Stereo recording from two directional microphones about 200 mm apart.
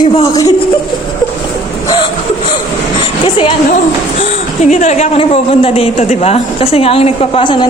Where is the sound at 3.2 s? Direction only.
25° left (ahead or behind).